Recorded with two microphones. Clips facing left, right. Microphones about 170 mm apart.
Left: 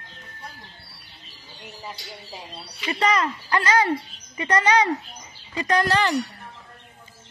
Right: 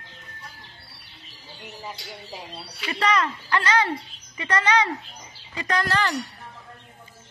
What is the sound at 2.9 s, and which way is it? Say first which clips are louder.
Speech: left 1 dB; 30° left (ahead or behind).